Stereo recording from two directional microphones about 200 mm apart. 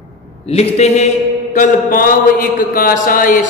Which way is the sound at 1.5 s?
40° left (ahead or behind).